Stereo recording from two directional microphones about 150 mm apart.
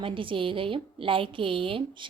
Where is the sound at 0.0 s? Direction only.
35° right (ahead or behind).